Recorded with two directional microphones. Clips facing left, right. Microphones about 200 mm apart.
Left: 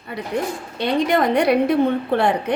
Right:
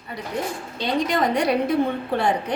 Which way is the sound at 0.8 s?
60° left (ahead or behind).